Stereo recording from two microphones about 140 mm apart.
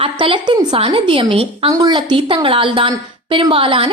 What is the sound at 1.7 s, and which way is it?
A woman's voice, 30° right (ahead or behind).